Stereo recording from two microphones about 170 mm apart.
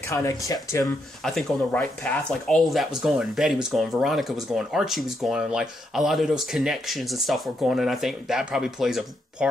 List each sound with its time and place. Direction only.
0.1 s speech: 20° left (ahead or behind)
1.2 s speech: centre (ahead or behind)